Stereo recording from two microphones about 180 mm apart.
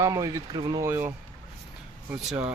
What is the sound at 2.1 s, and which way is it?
Speech, 5° right (ahead or behind).